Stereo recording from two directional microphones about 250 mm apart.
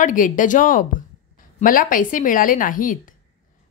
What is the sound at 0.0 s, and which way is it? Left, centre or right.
A woman's voice, left.